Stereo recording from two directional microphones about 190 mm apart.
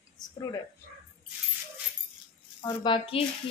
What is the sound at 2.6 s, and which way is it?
Speech, 25° left (ahead or behind).